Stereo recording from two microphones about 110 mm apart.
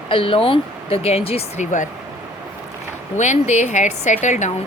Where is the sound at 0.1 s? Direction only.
55° left (ahead or behind).